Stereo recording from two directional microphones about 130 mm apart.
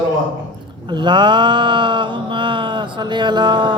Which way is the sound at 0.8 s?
35° right (ahead or behind).